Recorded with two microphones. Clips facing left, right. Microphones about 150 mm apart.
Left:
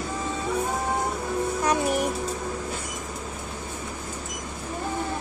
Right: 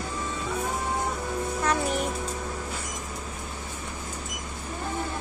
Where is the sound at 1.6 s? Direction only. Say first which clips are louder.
Left 2 dB; 15° left (ahead or behind).